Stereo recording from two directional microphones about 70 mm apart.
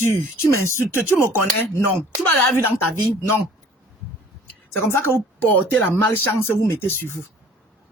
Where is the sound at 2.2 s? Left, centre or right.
Left.